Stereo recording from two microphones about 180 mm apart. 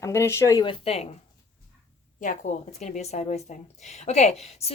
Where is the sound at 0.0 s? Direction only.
15° left (ahead or behind); by 1.1 s 35° left (ahead or behind).